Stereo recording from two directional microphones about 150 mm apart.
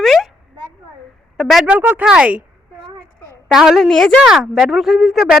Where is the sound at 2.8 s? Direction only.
25° right (ahead or behind).